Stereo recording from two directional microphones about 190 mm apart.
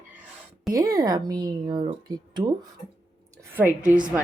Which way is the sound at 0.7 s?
20° right (ahead or behind).